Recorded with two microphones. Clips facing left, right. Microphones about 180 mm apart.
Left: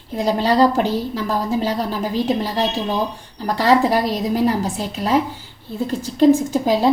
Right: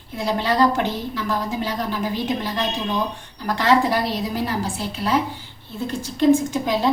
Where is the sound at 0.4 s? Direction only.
35° left (ahead or behind).